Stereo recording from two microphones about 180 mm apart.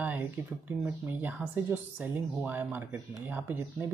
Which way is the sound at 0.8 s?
10° right (ahead or behind).